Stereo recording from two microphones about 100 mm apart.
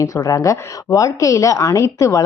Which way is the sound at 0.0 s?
35° left (ahead or behind).